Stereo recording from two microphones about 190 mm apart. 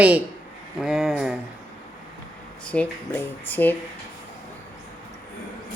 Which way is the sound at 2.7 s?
10° left (ahead or behind).